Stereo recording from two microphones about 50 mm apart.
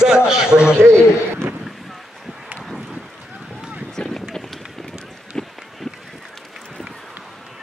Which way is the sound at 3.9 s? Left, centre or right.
Centre.